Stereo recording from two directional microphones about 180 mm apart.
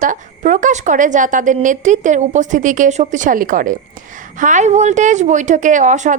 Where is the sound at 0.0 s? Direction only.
45° right (ahead or behind).